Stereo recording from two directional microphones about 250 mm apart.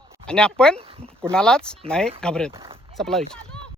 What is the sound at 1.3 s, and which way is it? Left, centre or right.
Speech, centre.